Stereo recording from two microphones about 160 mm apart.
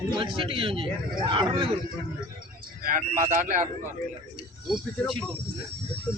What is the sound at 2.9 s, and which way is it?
Speech, 55° right (ahead or behind).